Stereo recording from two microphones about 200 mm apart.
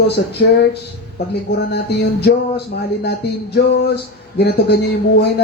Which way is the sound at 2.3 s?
55° left (ahead or behind).